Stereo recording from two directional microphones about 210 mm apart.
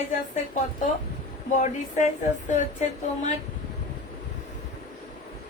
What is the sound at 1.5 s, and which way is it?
Speech, 35° left (ahead or behind).